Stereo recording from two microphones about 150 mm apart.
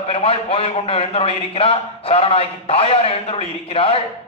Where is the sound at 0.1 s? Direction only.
40° left (ahead or behind).